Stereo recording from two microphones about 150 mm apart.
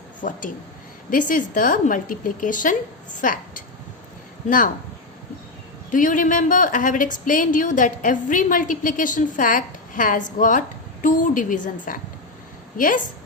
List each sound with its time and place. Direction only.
0.2 s a woman's voice: 60° left (ahead or behind)
5.9 s a woman's voice: 60° left (ahead or behind)